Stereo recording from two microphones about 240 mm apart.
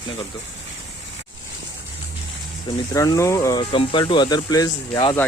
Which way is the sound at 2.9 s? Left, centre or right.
Centre.